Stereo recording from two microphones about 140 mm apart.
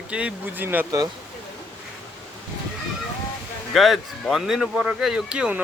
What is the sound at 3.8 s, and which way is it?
Speech, centre (ahead or behind).